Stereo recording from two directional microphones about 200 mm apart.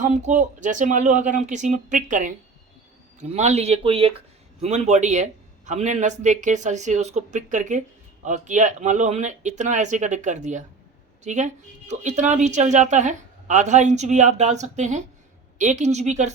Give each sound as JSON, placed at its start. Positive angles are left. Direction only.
{"t": 0.0, "sound": "speech", "side_deg": -40}